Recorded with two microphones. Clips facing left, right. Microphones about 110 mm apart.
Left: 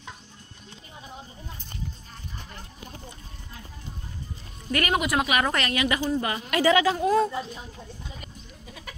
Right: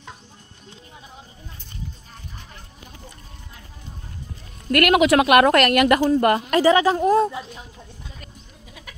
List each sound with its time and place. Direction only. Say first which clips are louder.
4.6 s speech: right 9 dB; 75° right (ahead or behind)
6.5 s a woman's voice: right 1 dB; 35° right (ahead or behind)